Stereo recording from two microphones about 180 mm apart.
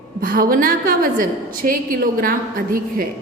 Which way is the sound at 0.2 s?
50° right (ahead or behind).